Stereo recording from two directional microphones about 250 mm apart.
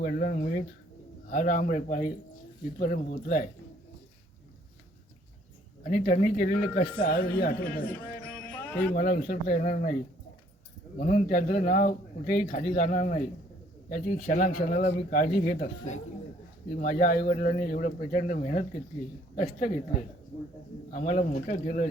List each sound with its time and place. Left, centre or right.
0.0 s a man's voice: left
5.8 s a man's voice: left
10.9 s a man's voice: left
20.9 s speech: left